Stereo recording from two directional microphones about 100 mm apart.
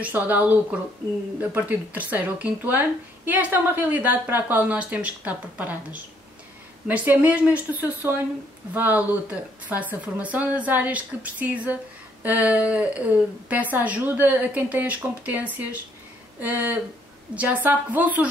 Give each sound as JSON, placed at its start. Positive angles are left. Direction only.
{"t": 0.0, "sound": "a woman's voice", "side_deg": -15}